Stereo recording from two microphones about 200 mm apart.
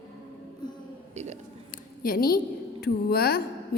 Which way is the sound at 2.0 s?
45° left (ahead or behind).